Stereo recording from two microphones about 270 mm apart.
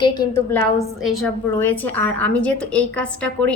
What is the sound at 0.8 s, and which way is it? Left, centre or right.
A woman's voice, centre.